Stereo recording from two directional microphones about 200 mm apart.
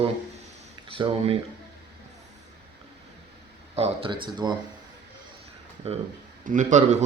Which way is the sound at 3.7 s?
30° right (ahead or behind).